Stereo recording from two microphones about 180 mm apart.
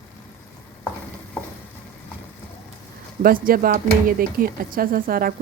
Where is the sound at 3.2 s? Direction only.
50° right (ahead or behind).